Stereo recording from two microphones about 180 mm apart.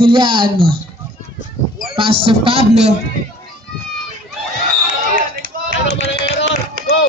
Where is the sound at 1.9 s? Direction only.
30° right (ahead or behind).